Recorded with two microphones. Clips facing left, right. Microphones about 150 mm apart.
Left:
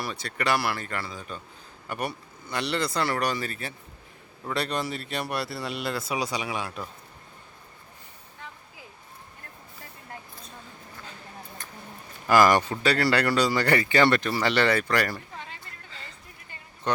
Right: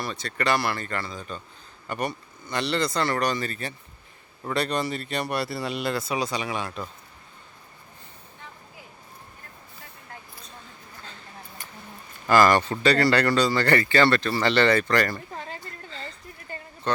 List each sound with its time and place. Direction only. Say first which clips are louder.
0.0 s speech: right 2 dB; 10° left (ahead or behind)
12.3 s speech: right 1 dB; 10° left (ahead or behind)
15.4 s a sound: right 5 dB; 40° right (ahead or behind)
16.9 s speech: right 1 dB; 15° left (ahead or behind)